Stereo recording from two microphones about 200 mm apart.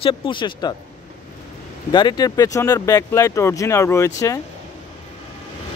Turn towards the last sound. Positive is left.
turn(degrees=15)  # may be behind; listen again after turning